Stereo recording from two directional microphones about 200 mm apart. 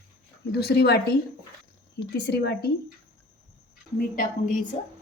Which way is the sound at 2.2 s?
55° left (ahead or behind).